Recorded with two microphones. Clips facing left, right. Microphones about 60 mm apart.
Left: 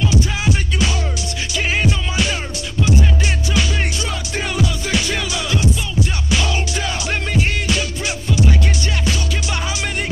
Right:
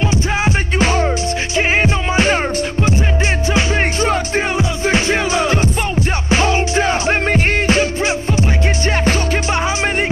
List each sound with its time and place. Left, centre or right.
0.0 s music: right
3.5 s music: right